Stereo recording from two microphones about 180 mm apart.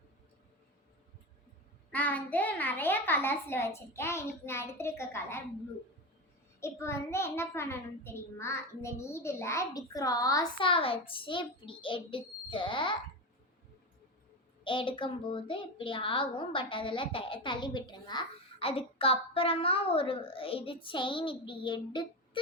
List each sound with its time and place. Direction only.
1.9 s a child's voice: 10° left (ahead or behind)
6.6 s a child's voice: 15° left (ahead or behind)
14.6 s a child's voice: 30° left (ahead or behind)